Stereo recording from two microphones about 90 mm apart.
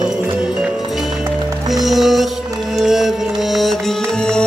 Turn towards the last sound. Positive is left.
turn(degrees=5)  # may be behind; listen again after turning